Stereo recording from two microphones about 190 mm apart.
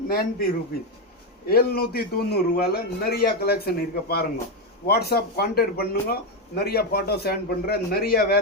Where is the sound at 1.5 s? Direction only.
55° left (ahead or behind).